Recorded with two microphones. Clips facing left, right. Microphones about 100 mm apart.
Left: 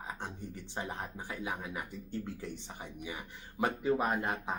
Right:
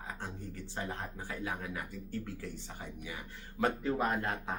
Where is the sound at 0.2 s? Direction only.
20° left (ahead or behind).